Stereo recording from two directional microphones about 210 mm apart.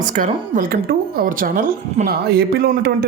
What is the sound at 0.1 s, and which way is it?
Speech, 40° right (ahead or behind).